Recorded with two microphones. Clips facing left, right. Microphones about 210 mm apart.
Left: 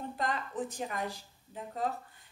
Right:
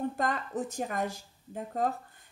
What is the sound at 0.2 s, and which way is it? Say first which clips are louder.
Speech: right 3 dB; 45° right (ahead or behind).